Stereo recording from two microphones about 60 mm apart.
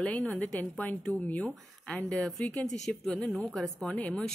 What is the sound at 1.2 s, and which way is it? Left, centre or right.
Speech, left.